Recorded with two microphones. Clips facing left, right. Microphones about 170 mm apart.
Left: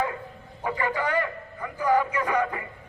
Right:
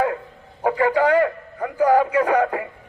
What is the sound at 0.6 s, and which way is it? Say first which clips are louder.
A man's voice: right 9 dB; 75° right (ahead or behind).